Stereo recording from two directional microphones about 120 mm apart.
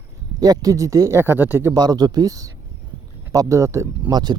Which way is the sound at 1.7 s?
35° right (ahead or behind).